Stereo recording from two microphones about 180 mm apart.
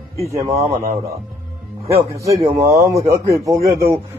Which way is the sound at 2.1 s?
15° right (ahead or behind).